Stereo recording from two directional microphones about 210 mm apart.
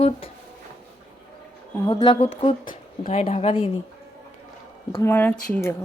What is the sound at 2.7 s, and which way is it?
Speech, 35° left (ahead or behind).